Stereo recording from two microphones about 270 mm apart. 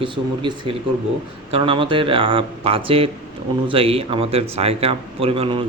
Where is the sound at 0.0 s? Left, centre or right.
Centre.